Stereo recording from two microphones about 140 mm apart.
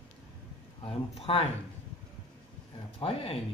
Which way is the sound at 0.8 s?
40° left (ahead or behind).